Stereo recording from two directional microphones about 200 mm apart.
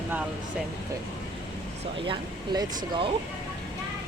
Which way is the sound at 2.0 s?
25° right (ahead or behind).